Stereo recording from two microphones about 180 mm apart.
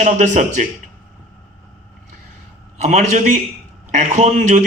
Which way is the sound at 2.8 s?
40° right (ahead or behind).